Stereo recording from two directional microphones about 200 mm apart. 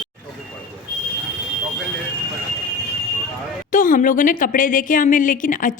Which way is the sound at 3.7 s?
40° left (ahead or behind).